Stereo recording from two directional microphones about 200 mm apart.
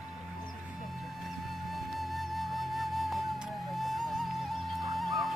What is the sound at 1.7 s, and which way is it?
Music, centre (ahead or behind).